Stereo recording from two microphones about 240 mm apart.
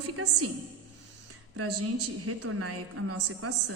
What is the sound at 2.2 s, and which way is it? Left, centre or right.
A woman's voice, right.